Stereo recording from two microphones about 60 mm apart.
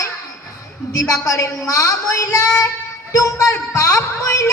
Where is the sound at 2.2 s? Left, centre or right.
Left.